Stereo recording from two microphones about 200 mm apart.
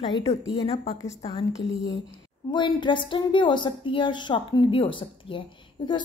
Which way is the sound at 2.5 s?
25° left (ahead or behind).